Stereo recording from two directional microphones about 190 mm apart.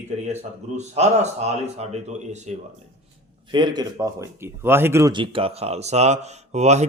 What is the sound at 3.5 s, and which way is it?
Speech, 25° right (ahead or behind).